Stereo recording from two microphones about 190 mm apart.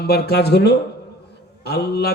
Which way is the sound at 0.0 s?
60° left (ahead or behind).